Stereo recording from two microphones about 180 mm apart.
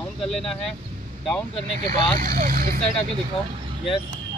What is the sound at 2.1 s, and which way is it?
Speech, 50° right (ahead or behind).